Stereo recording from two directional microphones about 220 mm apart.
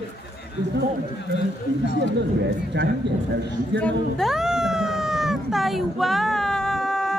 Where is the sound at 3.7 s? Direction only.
5° left (ahead or behind).